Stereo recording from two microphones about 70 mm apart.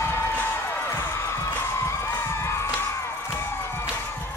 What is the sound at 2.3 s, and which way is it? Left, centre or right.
Music, left.